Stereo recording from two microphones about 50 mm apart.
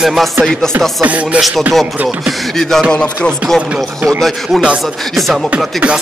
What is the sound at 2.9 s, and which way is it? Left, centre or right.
Music, centre.